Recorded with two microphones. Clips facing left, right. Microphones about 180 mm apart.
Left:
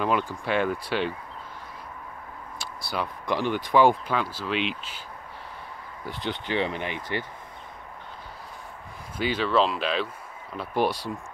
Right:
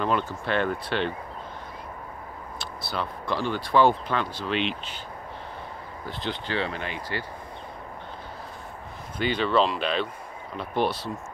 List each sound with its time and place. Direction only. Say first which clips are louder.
0.3 s speech: even; 10° left (ahead or behind)
2.6 s speech: left 1 dB; 10° left (ahead or behind)
6.0 s speech: left 1 dB; 15° left (ahead or behind)
9.2 s speech: even; 5° left (ahead or behind)